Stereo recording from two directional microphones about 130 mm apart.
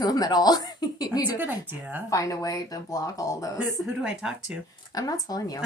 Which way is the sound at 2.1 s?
25° left (ahead or behind).